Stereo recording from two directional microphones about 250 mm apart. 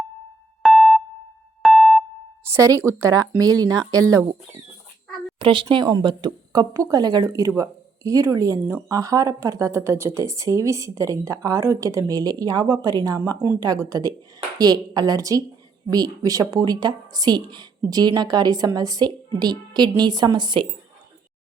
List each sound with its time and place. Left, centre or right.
0.6 s music: centre
2.5 s speech: centre
5.4 s speech: centre